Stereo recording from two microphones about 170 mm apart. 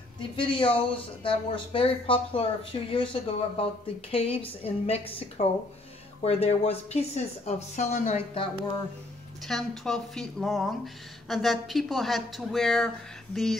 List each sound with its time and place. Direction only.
0.2 s speech: 30° left (ahead or behind)
9.5 s a woman's voice: centre (ahead or behind)